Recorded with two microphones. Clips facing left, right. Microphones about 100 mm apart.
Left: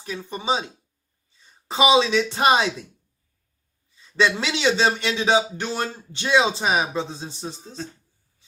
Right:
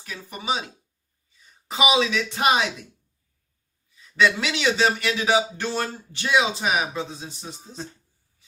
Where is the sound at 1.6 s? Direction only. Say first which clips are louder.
Left 4 dB; 30° left (ahead or behind).